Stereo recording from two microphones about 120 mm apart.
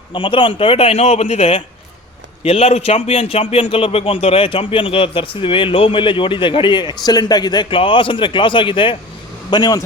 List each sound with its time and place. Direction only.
0.1 s a man's voice: 45° left (ahead or behind)